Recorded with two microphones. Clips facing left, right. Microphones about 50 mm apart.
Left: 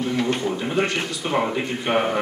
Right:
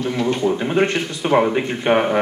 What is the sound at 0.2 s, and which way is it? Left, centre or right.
A man's voice, right.